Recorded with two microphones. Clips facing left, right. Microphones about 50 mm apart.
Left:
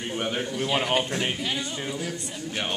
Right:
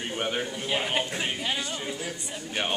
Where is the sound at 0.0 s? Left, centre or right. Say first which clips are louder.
Left 1 dB; centre.